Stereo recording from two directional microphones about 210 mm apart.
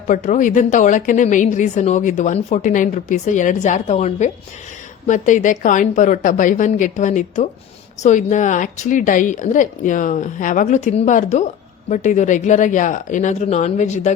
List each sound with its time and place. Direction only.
0.1 s a woman's voice: 35° left (ahead or behind)